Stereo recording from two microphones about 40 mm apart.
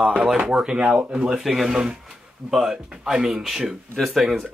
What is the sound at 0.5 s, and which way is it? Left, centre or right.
Speech, right.